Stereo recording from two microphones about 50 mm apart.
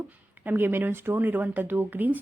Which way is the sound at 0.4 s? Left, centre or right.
Right.